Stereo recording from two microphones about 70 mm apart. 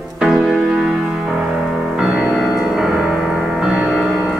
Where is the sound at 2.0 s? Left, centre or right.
Centre.